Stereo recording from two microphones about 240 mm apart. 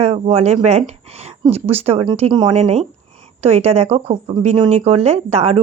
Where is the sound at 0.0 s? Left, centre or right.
Right.